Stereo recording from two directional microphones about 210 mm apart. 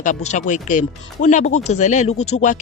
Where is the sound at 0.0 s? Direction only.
35° left (ahead or behind).